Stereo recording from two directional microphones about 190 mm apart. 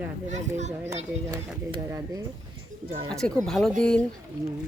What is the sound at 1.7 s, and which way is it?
Speech, 20° right (ahead or behind).